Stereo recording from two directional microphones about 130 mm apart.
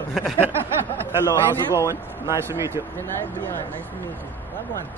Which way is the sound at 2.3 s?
20° right (ahead or behind).